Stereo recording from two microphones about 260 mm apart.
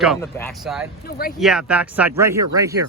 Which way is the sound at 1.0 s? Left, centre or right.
Left.